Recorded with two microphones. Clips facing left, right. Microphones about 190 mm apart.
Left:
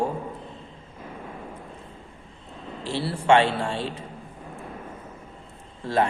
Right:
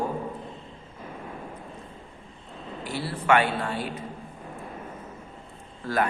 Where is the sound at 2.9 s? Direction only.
30° left (ahead or behind).